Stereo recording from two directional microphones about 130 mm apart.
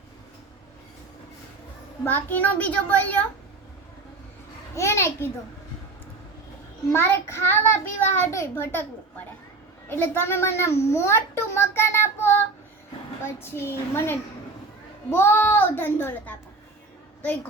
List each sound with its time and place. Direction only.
2.0 s a child's voice: 15° left (ahead or behind)
4.7 s a child's voice: 20° left (ahead or behind)
6.9 s a child's voice: 20° left (ahead or behind)